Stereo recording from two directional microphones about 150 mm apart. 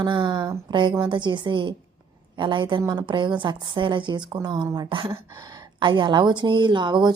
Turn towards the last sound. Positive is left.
turn(degrees=-30)  # may be behind; listen again after turning